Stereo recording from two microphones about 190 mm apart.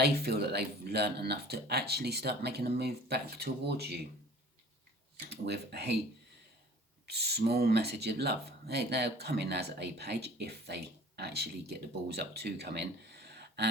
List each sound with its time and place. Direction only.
0.0 s speech: 55° right (ahead or behind)
5.3 s speech: 60° right (ahead or behind)
7.0 s speech: 60° right (ahead or behind)
13.2 s gasp: 60° right (ahead or behind)